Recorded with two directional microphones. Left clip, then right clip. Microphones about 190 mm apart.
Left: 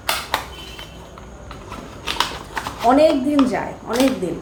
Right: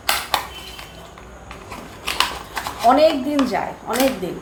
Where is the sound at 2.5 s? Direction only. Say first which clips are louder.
Even; 5° left (ahead or behind).